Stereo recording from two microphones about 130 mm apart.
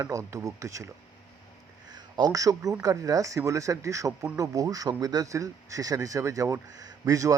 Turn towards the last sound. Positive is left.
turn(degrees=-25)  # may be behind; listen again after turning